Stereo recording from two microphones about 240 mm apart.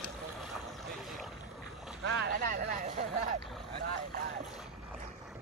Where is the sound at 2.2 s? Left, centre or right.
Right.